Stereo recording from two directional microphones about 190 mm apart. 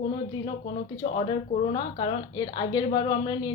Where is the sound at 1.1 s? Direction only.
30° left (ahead or behind).